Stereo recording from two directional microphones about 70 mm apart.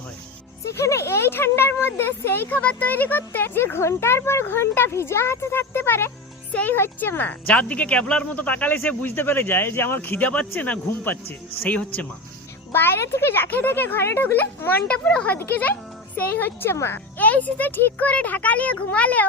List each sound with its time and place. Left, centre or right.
0.6 s speech: left
6.5 s speech: centre
6.7 s speech: left
12.7 s speech: left
14.9 s speech: centre
15.3 s speech: left